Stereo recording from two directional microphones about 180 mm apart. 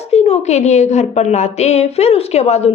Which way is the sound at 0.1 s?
35° left (ahead or behind).